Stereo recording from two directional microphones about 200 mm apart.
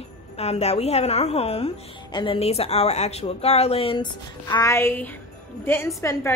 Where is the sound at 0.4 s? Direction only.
30° left (ahead or behind).